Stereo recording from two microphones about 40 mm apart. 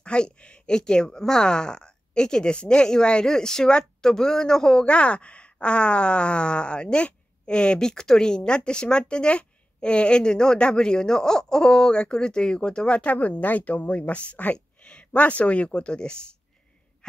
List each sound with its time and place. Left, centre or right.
0.0 s speech: left
4.8 s speech: left